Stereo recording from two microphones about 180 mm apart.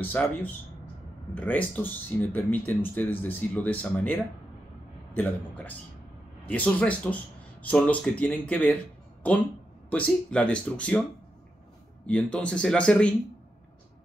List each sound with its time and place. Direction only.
0.0 s speech: 10° left (ahead or behind)
9.8 s speech: 5° left (ahead or behind)
12.1 s speech: 5° left (ahead or behind)